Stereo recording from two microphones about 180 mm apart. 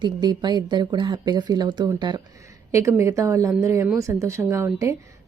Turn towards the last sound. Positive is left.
turn(degrees=-15)  # may be behind; listen again after turning